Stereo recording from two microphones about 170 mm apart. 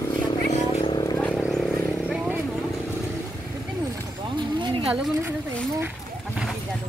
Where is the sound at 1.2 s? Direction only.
5° left (ahead or behind).